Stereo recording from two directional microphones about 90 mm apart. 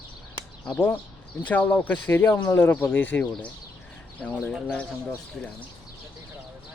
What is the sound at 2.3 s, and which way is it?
Speech, 45° left (ahead or behind).